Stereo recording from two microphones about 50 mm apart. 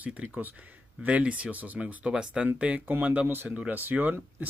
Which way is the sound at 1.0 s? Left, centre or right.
Right.